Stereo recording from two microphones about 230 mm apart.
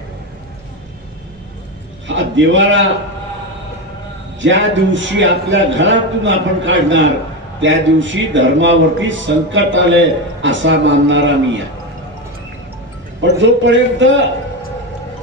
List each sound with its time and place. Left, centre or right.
2.0 s a man's voice: right
4.4 s a man's voice: right
13.2 s a man's voice: right